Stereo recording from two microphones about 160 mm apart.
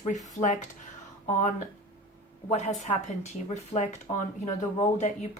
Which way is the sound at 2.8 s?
45° left (ahead or behind).